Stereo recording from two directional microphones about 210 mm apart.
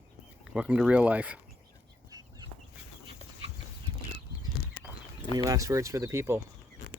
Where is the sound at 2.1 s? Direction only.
15° right (ahead or behind).